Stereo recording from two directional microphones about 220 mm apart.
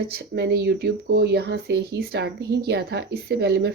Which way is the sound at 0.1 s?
50° right (ahead or behind).